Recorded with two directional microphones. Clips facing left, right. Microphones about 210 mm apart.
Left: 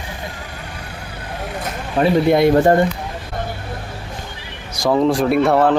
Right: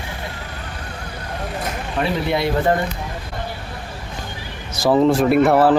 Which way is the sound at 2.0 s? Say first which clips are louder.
Left 8 dB; 45° left (ahead or behind).